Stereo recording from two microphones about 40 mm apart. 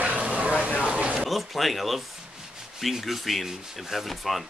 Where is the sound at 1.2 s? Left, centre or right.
Centre.